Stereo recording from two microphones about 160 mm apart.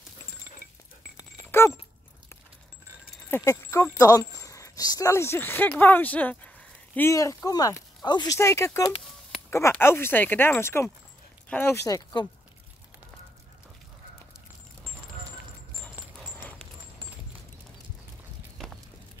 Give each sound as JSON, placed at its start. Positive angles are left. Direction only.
{"t": 1.5, "sound": "dog", "side_deg": 15}
{"t": 3.3, "sound": "speech", "side_deg": 15}